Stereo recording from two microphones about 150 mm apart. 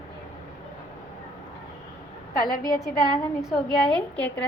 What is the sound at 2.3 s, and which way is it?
Speech, 75° left (ahead or behind).